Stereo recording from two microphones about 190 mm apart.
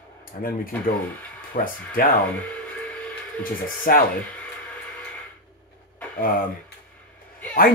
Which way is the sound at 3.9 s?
50° left (ahead or behind).